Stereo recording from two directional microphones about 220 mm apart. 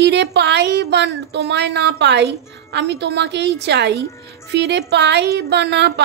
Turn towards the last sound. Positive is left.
turn(degrees=-50)  # may be behind; listen again after turning